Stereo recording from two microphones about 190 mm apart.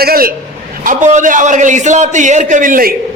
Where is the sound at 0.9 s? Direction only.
40° right (ahead or behind).